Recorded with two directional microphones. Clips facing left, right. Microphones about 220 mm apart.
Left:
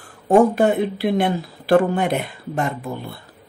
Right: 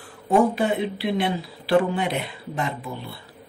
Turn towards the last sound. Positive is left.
turn(degrees=50)  # may be behind; listen again after turning